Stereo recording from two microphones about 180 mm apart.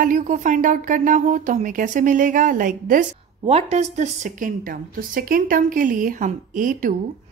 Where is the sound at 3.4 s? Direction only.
35° right (ahead or behind).